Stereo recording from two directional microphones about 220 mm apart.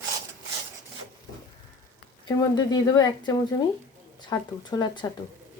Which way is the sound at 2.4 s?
15° left (ahead or behind).